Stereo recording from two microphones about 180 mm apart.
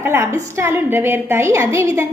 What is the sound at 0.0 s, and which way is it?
A woman's voice, 15° right (ahead or behind).